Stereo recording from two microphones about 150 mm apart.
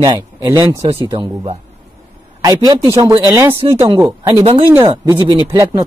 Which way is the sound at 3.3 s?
15° right (ahead or behind).